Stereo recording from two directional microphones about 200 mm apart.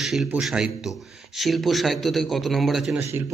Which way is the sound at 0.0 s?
Centre (ahead or behind).